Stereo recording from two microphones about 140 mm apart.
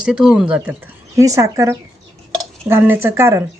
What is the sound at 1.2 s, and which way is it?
Speech, 25° right (ahead or behind).